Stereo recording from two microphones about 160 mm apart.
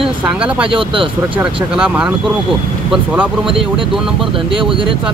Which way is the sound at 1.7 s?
5° right (ahead or behind).